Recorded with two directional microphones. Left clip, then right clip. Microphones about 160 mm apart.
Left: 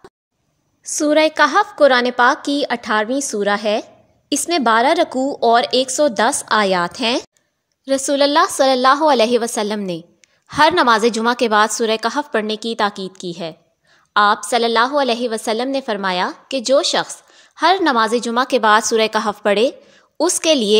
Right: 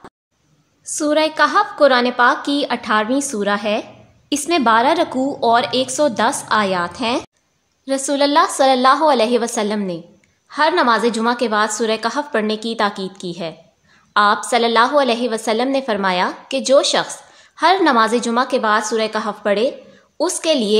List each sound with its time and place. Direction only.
0.9 s a woman's voice: 40° left (ahead or behind)